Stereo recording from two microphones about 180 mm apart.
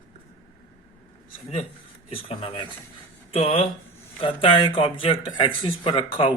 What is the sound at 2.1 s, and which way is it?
Speech, 30° left (ahead or behind).